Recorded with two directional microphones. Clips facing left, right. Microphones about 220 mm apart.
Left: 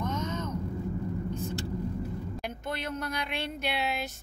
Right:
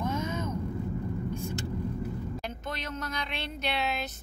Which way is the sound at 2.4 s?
10° left (ahead or behind).